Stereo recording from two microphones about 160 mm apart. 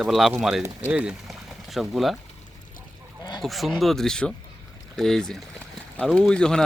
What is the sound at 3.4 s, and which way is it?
Speech, centre (ahead or behind).